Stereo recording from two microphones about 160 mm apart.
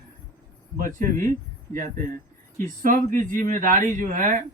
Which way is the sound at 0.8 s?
55° right (ahead or behind).